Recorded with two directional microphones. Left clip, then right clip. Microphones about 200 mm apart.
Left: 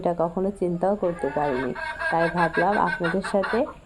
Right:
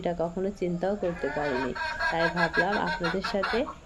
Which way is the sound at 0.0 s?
10° left (ahead or behind).